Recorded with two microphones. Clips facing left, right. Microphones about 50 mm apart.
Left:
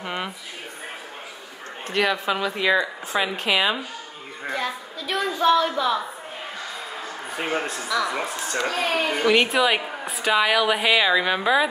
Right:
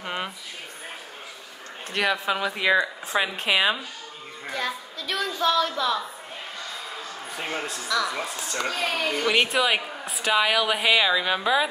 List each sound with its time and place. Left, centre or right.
0.0 s a sound: centre
1.9 s a woman's voice: centre
4.5 s a woman's voice: centre
7.9 s a woman's voice: centre
8.5 s a child's voice: left
9.3 s a woman's voice: centre